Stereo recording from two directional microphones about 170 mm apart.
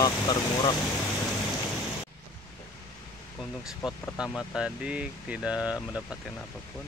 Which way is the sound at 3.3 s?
Centre (ahead or behind).